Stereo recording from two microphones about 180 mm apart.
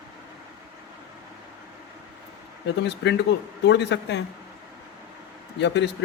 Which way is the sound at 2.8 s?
75° left (ahead or behind).